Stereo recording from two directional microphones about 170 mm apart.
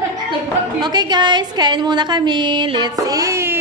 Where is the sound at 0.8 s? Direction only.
25° right (ahead or behind).